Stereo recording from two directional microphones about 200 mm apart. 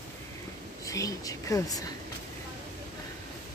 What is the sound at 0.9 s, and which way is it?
Speech, 15° left (ahead or behind).